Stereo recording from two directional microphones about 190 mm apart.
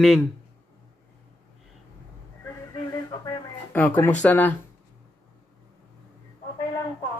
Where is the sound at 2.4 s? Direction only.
20° left (ahead or behind).